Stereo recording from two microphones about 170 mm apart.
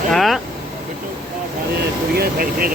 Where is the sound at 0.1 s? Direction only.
Centre (ahead or behind).